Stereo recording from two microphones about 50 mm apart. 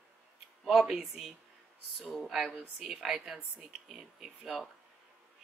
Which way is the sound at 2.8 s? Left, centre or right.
Centre.